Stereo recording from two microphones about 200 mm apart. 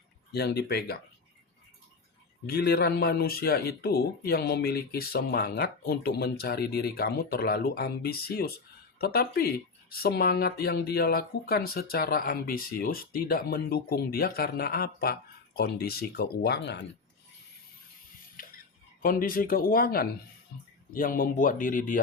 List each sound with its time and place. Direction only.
0.3 s speech: 55° left (ahead or behind)
2.5 s speech: 50° left (ahead or behind)
18.4 s a sound: 45° left (ahead or behind)
19.0 s speech: 45° left (ahead or behind)